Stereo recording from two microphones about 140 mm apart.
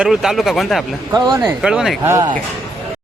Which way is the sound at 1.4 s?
5° right (ahead or behind).